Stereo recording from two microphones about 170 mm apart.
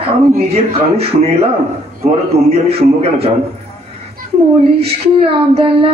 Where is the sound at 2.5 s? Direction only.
35° right (ahead or behind).